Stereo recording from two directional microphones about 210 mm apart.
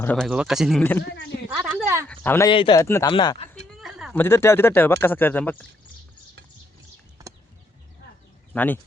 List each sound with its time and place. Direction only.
0.0 s speech: 5° left (ahead or behind)
1.5 s a sound: 5° right (ahead or behind)
2.0 s speech: 10° left (ahead or behind)
2.5 s speech: 25° left (ahead or behind)
2.8 s a man's voice: 10° left (ahead or behind)
3.1 s speech: 25° left (ahead or behind)
3.5 s a sound: centre (ahead or behind)
4.2 s a man's voice: 10° left (ahead or behind)
8.5 s a man's voice: 10° left (ahead or behind)